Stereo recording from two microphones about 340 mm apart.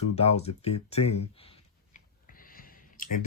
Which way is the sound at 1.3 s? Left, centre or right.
Centre.